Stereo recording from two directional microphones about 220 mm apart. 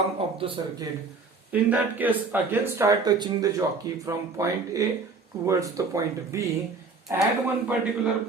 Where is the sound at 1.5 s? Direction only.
5° right (ahead or behind).